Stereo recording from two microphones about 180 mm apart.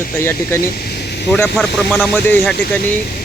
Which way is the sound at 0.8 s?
65° left (ahead or behind).